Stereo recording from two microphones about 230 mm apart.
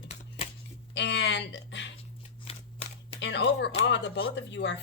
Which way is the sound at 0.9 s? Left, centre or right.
Left.